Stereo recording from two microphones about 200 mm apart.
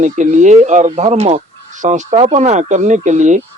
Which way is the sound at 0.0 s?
40° right (ahead or behind).